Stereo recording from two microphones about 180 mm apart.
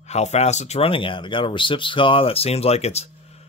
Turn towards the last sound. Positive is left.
turn(degrees=35)  # may be behind; listen again after turning